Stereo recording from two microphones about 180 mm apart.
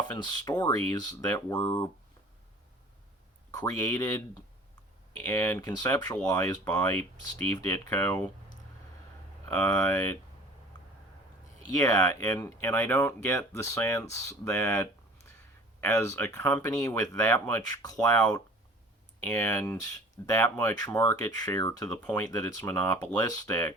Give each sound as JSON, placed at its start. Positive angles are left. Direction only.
{"t": 0.1, "sound": "speech", "side_deg": 25}
{"t": 3.5, "sound": "speech", "side_deg": 20}
{"t": 5.2, "sound": "speech", "side_deg": 10}
{"t": 9.5, "sound": "speech", "side_deg": 10}
{"t": 11.8, "sound": "speech", "side_deg": 20}
{"t": 19.2, "sound": "speech", "side_deg": 10}
{"t": 21.2, "sound": "speech", "side_deg": 20}